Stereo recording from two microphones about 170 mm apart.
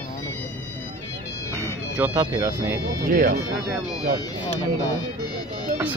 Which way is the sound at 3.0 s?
55° right (ahead or behind).